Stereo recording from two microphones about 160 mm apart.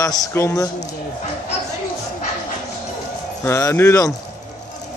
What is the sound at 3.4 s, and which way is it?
Speech, 15° left (ahead or behind).